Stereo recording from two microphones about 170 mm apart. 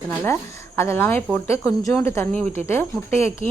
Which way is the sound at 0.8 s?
15° left (ahead or behind).